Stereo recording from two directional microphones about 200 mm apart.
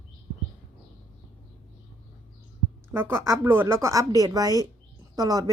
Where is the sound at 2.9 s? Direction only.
10° right (ahead or behind).